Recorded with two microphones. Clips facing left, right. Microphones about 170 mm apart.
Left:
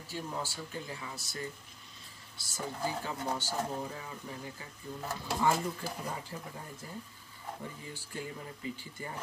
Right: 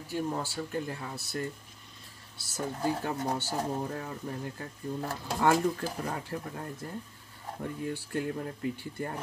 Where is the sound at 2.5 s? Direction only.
60° right (ahead or behind).